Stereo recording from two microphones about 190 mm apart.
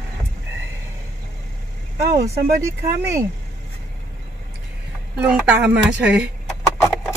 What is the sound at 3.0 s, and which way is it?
Speech, 15° right (ahead or behind).